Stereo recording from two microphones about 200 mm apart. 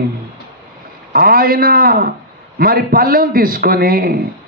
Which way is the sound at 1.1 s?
50° right (ahead or behind).